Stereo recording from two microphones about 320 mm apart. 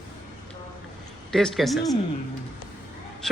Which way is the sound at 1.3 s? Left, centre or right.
Centre.